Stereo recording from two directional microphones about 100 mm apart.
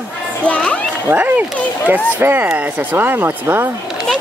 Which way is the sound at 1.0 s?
20° right (ahead or behind).